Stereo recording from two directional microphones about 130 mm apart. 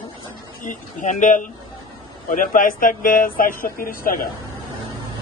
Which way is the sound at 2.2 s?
90° left.